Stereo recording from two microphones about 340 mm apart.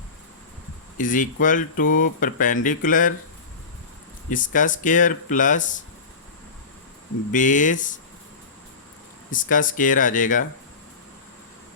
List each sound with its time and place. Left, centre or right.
0.9 s speech: left
4.3 s speech: left
7.3 s speech: left
9.3 s speech: left